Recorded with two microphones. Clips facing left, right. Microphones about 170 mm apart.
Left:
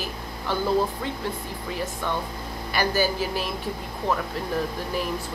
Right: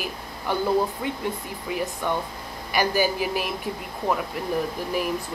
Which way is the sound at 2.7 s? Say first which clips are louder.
Right 1 dB; 15° right (ahead or behind).